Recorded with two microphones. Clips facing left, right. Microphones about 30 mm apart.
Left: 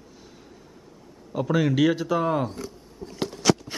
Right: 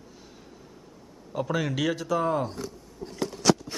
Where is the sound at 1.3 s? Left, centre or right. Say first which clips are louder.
Left 6 dB; centre.